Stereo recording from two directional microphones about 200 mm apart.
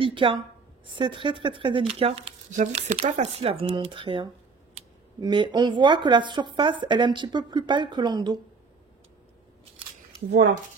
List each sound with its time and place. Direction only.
0.0 s a woman's voice: 25° right (ahead or behind)